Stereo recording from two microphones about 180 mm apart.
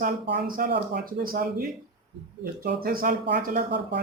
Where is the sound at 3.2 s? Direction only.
65° right (ahead or behind).